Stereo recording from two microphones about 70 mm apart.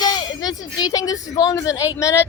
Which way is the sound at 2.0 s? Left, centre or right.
Left.